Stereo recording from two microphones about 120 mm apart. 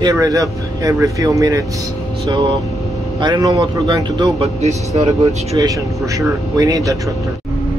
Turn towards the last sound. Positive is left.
turn(degrees=-30)  # may be behind; listen again after turning